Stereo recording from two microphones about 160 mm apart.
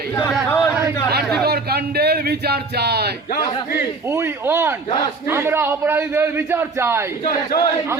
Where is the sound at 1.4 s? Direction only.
80° right.